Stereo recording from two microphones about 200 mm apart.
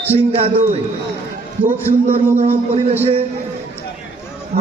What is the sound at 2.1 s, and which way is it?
Speech, 30° right (ahead or behind).